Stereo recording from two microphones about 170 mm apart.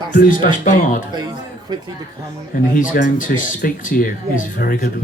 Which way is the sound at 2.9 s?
55° left (ahead or behind).